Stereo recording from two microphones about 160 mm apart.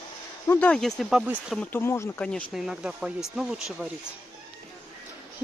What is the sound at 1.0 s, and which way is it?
Speech, 5° right (ahead or behind).